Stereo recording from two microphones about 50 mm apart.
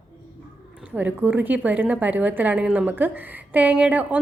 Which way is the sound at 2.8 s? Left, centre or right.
Right.